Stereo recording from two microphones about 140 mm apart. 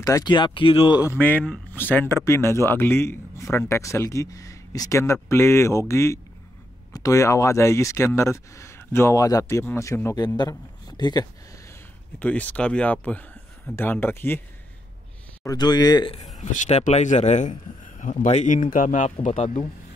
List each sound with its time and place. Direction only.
0.0 s speech: 25° left (ahead or behind)
1.1 s a man's voice: 10° left (ahead or behind); by 11.2 s 30° left (ahead or behind)
12.2 s speech: 10° left (ahead or behind)
15.4 s a man's voice: 30° left (ahead or behind)
16.3 s a man's voice: 55° left (ahead or behind)